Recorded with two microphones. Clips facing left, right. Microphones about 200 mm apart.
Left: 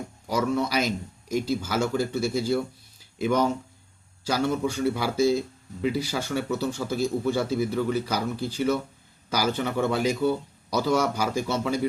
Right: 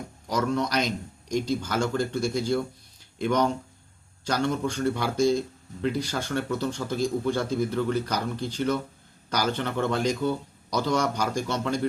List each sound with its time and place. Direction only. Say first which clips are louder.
0.3 s speech: left 1 dB; 5° left (ahead or behind)